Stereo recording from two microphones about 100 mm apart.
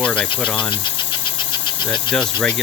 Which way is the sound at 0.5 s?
50° left (ahead or behind).